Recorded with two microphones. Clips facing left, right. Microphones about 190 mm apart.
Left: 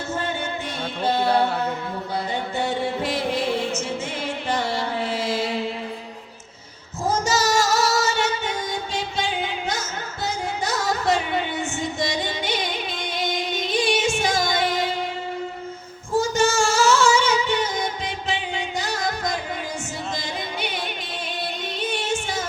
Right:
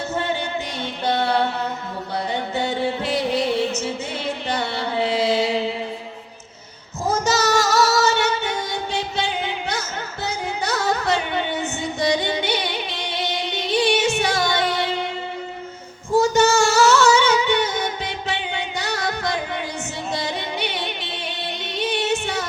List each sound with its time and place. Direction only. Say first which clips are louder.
7.3 s music: right 2 dB; 65° right (ahead or behind)
10.2 s music: right 1 dB; 65° right (ahead or behind)
12.2 s music: right 3 dB; 65° right (ahead or behind)
16.2 s music: right 4 dB; 65° right (ahead or behind)
21.8 s music: right 5 dB; 65° right (ahead or behind)